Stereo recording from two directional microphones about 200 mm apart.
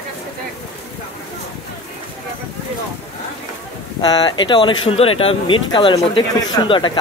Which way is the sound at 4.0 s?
20° left (ahead or behind).